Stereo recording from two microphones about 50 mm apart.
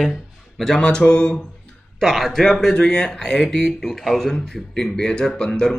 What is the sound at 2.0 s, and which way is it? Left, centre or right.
Speech, centre.